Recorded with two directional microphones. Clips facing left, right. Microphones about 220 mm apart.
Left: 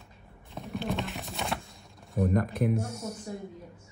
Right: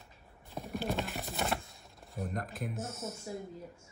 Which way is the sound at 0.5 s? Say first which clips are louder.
Left 2 dB; centre (ahead or behind).